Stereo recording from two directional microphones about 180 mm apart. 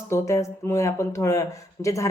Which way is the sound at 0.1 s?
15° left (ahead or behind).